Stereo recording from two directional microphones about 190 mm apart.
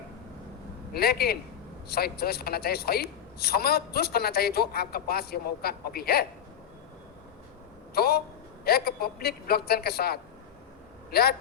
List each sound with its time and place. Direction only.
0.9 s a woman's voice: 55° left (ahead or behind)
7.9 s a woman's voice: 55° left (ahead or behind)